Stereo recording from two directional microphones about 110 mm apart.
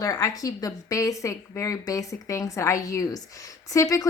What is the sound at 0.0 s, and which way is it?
A woman's voice, 30° left (ahead or behind).